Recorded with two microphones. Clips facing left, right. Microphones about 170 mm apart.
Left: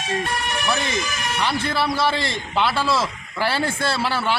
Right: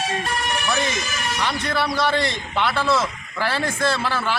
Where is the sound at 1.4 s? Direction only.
30° left (ahead or behind).